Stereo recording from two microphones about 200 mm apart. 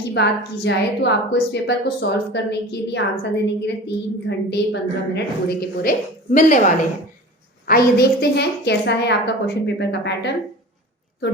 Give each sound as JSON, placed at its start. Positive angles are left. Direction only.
{"t": 0.1, "sound": "a woman's voice", "side_deg": 60}
{"t": 6.3, "sound": "a woman's voice", "side_deg": 40}
{"t": 7.7, "sound": "a woman's voice", "side_deg": 50}